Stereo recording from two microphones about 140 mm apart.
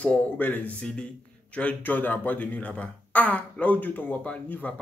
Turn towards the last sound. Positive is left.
turn(degrees=10)  # may be behind; listen again after turning